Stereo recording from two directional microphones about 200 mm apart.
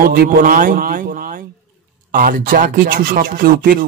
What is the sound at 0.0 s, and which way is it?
Speech, 50° right (ahead or behind).